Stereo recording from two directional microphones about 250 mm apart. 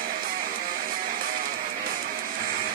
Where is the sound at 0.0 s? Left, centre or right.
Right.